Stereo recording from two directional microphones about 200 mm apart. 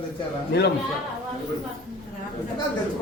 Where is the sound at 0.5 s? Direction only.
55° left (ahead or behind).